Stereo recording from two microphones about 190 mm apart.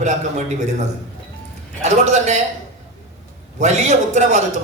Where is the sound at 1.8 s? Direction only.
40° right (ahead or behind).